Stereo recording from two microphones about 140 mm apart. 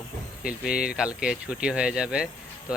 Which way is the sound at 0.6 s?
5° right (ahead or behind).